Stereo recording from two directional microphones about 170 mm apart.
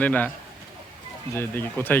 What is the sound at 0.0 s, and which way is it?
Speech, 10° left (ahead or behind).